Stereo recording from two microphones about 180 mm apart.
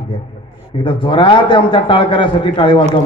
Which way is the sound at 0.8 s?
30° left (ahead or behind).